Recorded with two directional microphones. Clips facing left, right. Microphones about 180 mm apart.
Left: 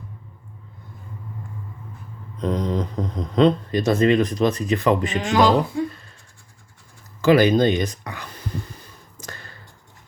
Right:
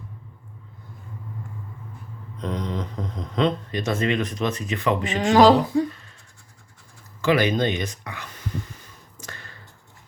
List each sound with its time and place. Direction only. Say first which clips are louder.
2.4 s speech: left 5 dB; 40° left (ahead or behind)
5.1 s speech: right 7 dB; 35° right (ahead or behind)
5.9 s scratch: even; 35° left (ahead or behind)
7.2 s a sound: left 5 dB; 35° left (ahead or behind)